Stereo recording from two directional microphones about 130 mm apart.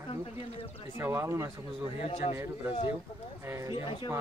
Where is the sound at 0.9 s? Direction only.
20° right (ahead or behind).